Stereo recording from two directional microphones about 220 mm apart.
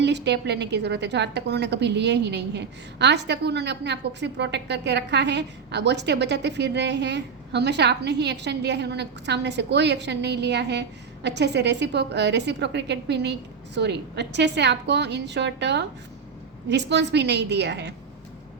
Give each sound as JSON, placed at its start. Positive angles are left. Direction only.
{"t": 0.0, "sound": "a woman's voice", "side_deg": -50}